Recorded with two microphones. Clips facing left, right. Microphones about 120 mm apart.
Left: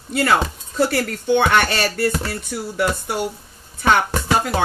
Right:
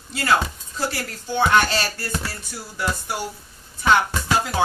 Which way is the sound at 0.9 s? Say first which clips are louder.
Left 10 dB; 65° left (ahead or behind).